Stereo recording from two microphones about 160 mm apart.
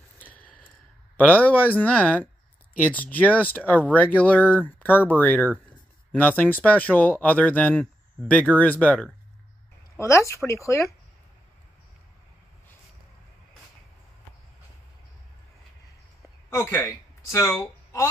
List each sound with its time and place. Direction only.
0.2 s a sound: 10° left (ahead or behind)
1.1 s speech: 10° left (ahead or behind)
9.9 s speech: 20° left (ahead or behind)
16.4 s speech: 15° left (ahead or behind)